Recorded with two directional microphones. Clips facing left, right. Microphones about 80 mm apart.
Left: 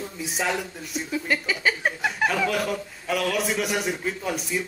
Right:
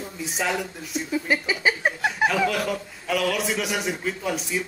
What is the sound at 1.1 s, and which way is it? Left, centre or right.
Speech, centre.